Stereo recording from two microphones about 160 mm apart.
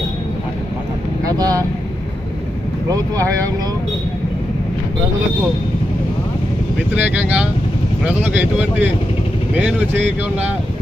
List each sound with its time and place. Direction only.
1.4 s speech: 25° right (ahead or behind)
6.9 s speech: 10° right (ahead or behind)